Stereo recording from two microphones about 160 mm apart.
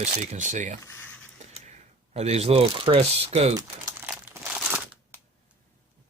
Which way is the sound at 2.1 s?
40° right (ahead or behind).